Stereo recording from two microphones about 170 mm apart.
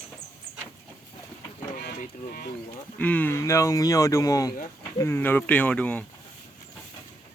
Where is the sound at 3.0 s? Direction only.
10° left (ahead or behind).